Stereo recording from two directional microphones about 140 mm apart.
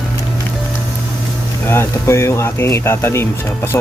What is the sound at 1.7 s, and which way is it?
Speech, 20° left (ahead or behind).